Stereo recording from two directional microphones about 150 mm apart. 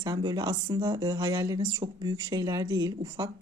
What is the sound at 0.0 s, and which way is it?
Speech, 25° right (ahead or behind).